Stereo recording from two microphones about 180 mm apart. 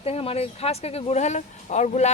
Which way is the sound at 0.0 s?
35° left (ahead or behind).